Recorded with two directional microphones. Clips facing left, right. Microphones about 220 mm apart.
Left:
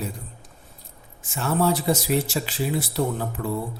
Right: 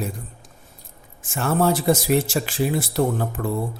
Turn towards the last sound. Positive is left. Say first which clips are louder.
# right 3 dB
turn(degrees=-50)  # may be behind; listen again after turning